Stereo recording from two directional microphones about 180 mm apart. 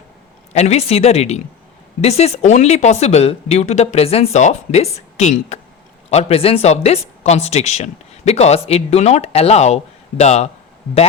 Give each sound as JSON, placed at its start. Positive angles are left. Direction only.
{"t": 0.5, "sound": "speech", "side_deg": 35}